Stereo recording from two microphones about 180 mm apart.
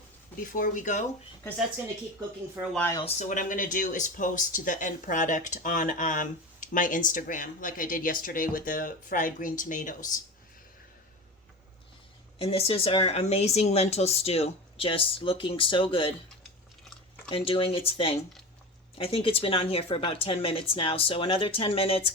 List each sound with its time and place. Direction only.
0.3 s speech: 50° left (ahead or behind)
3.0 s speech: 45° left (ahead or behind)
12.4 s speech: 35° left (ahead or behind)
17.2 s speech: 30° left (ahead or behind)